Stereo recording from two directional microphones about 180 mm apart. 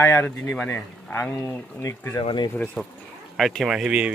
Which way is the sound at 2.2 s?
25° left (ahead or behind).